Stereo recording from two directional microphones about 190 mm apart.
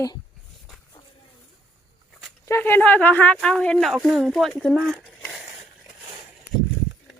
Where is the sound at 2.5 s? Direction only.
10° left (ahead or behind).